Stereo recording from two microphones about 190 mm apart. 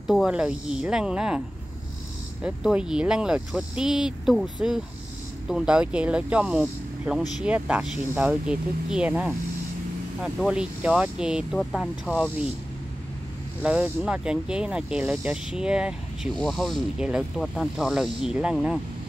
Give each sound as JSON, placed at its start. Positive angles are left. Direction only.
{"t": 0.0, "sound": "speech", "side_deg": 0}
{"t": 2.4, "sound": "speech", "side_deg": -5}
{"t": 13.6, "sound": "speech", "side_deg": -10}